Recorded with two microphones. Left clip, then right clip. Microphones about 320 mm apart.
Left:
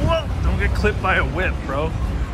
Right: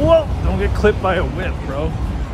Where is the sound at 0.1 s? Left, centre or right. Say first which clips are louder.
Right 8 dB; centre.